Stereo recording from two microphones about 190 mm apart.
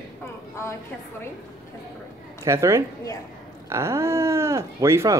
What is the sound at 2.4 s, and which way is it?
Speech, 15° right (ahead or behind).